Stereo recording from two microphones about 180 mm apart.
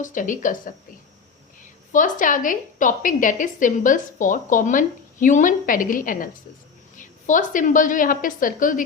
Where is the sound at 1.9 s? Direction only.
45° left (ahead or behind).